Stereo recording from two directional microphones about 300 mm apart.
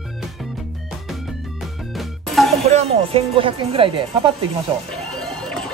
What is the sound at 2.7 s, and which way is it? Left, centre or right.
Speech, centre.